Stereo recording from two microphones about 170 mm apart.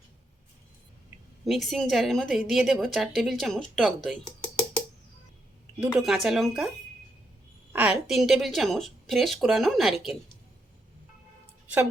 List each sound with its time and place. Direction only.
1.5 s a woman's voice: centre (ahead or behind)
5.8 s a woman's voice: 5° right (ahead or behind)
7.7 s a woman's voice: 10° right (ahead or behind)